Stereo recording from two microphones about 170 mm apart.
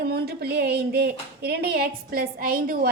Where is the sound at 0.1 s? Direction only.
70° right (ahead or behind).